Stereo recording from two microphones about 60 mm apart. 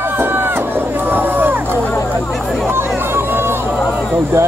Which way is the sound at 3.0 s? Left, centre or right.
Right.